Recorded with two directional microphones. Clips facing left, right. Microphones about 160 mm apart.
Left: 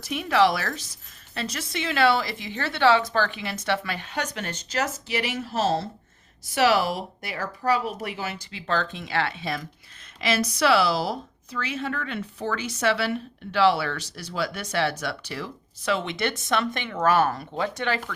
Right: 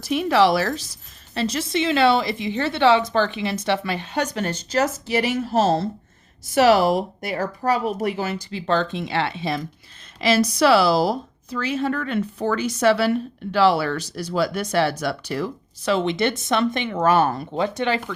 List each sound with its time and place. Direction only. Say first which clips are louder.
0.0 s a woman's voice: right 4 dB; 30° right (ahead or behind)
8.4 s a woman's voice: right 5 dB; 30° right (ahead or behind)